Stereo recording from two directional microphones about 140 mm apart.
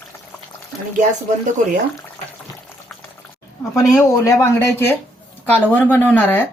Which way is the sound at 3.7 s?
25° left (ahead or behind).